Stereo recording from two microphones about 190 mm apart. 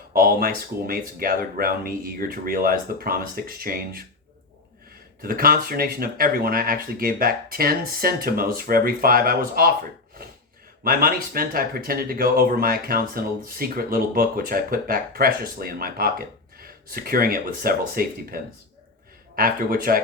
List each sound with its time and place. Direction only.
0.1 s speech: 50° right (ahead or behind)
5.2 s speech: 50° right (ahead or behind)
10.8 s speech: 50° right (ahead or behind)
19.4 s speech: 50° right (ahead or behind)